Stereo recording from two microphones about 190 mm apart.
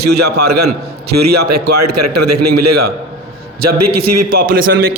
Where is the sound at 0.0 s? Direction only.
60° right (ahead or behind).